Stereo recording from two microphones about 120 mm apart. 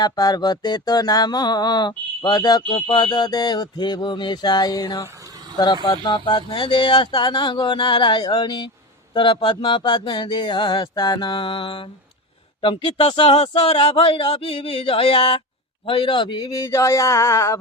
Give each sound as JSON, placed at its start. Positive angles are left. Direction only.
{"t": 0.0, "sound": "a man's voice", "side_deg": 35}